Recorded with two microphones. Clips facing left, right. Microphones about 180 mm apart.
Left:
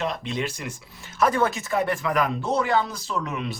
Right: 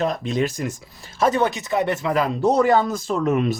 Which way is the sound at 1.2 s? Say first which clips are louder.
Right 2 dB; 20° right (ahead or behind).